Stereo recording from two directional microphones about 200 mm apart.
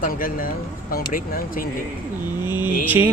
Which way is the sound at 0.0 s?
45° left (ahead or behind).